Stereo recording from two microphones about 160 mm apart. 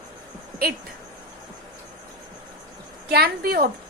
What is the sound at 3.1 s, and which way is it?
Speech, 75° right (ahead or behind).